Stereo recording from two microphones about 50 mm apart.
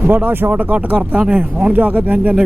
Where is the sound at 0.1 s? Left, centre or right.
Right.